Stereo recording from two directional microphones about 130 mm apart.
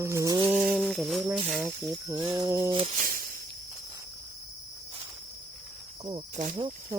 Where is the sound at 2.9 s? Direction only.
90° right.